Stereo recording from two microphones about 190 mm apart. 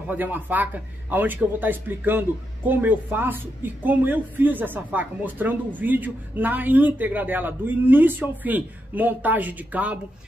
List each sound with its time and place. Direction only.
0.1 s a man's voice: 10° right (ahead or behind)